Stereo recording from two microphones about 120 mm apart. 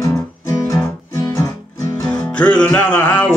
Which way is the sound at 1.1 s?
25° left (ahead or behind).